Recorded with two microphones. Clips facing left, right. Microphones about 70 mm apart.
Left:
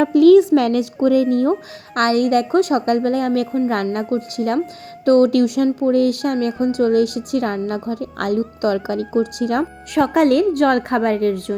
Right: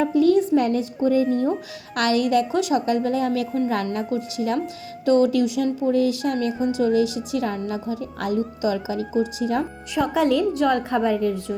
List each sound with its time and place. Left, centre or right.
0.0 s a woman's voice: left
1.0 s speech: left
2.0 s a woman's voice: left